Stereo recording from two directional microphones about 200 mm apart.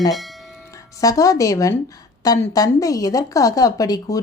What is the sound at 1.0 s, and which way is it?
A woman's voice, 15° left (ahead or behind).